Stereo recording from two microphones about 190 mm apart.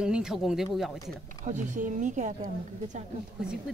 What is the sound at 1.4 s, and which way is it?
A woman's voice, 40° right (ahead or behind).